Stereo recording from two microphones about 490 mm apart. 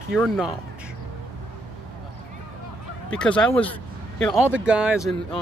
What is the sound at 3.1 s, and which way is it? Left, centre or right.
Speech, centre.